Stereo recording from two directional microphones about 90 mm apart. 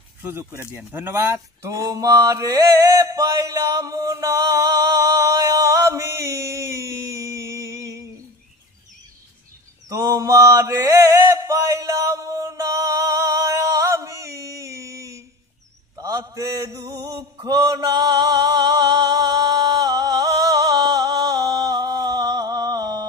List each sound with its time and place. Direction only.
0.2 s speech: 25° right (ahead or behind)
9.8 s mantra: 30° right (ahead or behind); by 23.0 s 45° right (ahead or behind)